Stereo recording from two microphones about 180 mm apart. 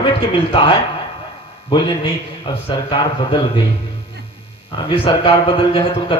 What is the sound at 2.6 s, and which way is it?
Speech, 30° left (ahead or behind).